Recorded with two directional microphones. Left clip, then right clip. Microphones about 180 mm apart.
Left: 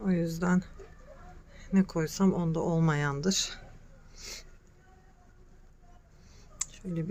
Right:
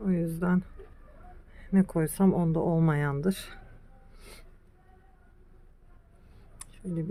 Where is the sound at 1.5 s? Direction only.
15° right (ahead or behind).